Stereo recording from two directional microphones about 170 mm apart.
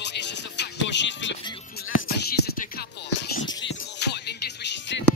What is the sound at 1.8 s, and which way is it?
Music, 65° left (ahead or behind).